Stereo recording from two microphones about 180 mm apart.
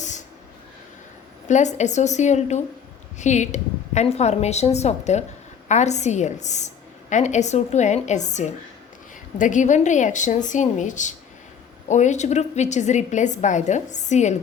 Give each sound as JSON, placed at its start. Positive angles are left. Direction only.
{"t": 1.5, "sound": "a woman's voice", "side_deg": 40}